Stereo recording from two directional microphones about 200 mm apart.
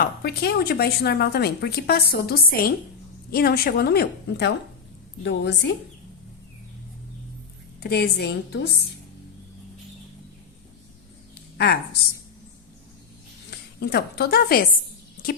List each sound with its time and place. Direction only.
0.0 s a woman's voice: 50° left (ahead or behind)
7.9 s a woman's voice: 55° left (ahead or behind)
11.5 s a woman's voice: 55° left (ahead or behind)
13.5 s a woman's voice: 55° left (ahead or behind)